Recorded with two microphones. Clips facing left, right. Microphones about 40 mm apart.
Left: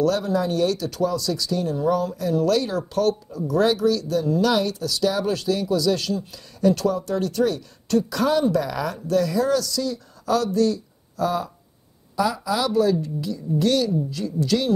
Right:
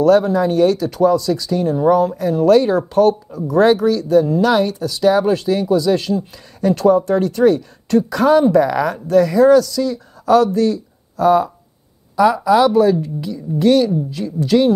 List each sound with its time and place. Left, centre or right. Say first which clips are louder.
0.0 s a woman's voice: right 8 dB; right